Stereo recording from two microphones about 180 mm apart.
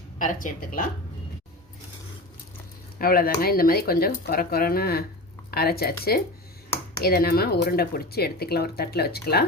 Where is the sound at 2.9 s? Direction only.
55° left (ahead or behind).